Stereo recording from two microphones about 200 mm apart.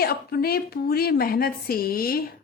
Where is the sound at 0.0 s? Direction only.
50° left (ahead or behind).